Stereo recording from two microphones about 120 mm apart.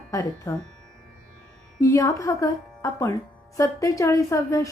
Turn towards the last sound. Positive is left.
turn(degrees=25)  # may be behind; listen again after turning